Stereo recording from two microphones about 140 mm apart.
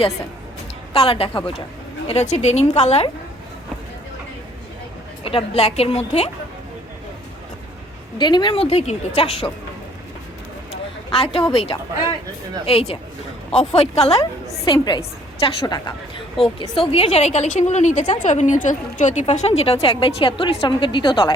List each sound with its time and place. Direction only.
0.9 s a woman's voice: 40° left (ahead or behind)
2.0 s a woman's voice: 50° left (ahead or behind)
5.2 s a woman's voice: 40° left (ahead or behind)
8.2 s a woman's voice: 30° left (ahead or behind)
10.7 s a sound: 45° left (ahead or behind)
11.5 s a woman's voice: 45° left (ahead or behind)
14.7 s a woman's voice: 35° left (ahead or behind); by 18.0 s 55° left (ahead or behind)
18.0 s a woman's voice: 35° left (ahead or behind)
18.3 s a woman's voice: 65° left (ahead or behind)
19.2 s a woman's voice: 50° left (ahead or behind); by 21.3 s 35° left (ahead or behind)